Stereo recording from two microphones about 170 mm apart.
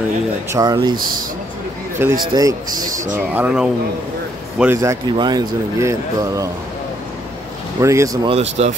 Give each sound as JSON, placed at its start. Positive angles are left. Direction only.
{"t": 0.5, "sound": "speech", "side_deg": -20}
{"t": 2.0, "sound": "speech", "side_deg": -15}
{"t": 2.8, "sound": "speech", "side_deg": -50}
{"t": 3.2, "sound": "speech", "side_deg": -10}
{"t": 5.1, "sound": "speech", "side_deg": -25}
{"t": 7.8, "sound": "speech", "side_deg": -15}
{"t": 8.3, "sound": "speech", "side_deg": -40}